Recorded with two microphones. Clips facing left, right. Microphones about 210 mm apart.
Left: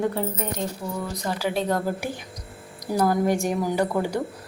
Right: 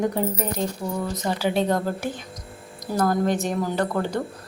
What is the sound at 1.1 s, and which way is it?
Speech, 25° right (ahead or behind).